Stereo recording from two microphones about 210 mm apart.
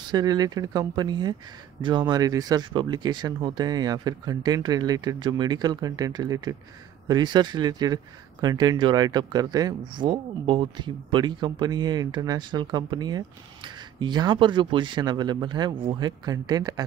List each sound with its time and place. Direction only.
0.1 s speech: 20° right (ahead or behind)